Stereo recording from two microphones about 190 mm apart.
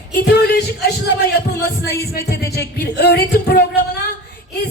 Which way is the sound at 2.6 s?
60° left (ahead or behind).